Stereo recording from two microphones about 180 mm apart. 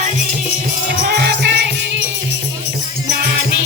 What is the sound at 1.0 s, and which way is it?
Music, 65° right (ahead or behind).